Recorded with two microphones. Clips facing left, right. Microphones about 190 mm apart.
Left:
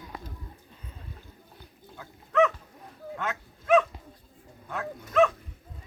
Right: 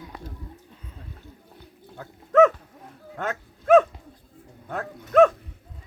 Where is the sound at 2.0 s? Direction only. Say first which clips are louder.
Right 7 dB; 45° right (ahead or behind).